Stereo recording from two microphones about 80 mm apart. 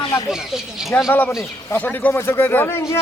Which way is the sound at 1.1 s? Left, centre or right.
Left.